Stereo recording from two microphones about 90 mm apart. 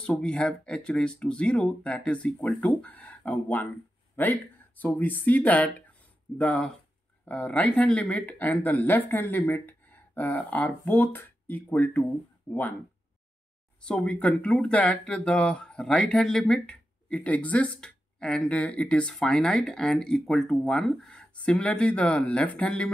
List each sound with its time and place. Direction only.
0.0 s speech: 10° left (ahead or behind)
13.7 s speech: 10° left (ahead or behind)